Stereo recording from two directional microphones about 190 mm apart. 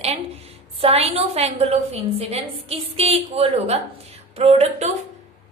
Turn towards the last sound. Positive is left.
turn(degrees=-35)  # may be behind; listen again after turning